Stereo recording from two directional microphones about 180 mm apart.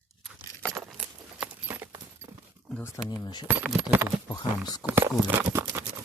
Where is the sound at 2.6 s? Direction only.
5° left (ahead or behind).